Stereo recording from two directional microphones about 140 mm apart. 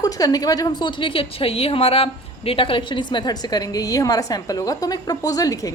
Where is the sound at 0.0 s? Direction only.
25° left (ahead or behind).